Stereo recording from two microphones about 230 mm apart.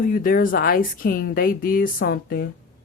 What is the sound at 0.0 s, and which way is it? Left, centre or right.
Speech, left.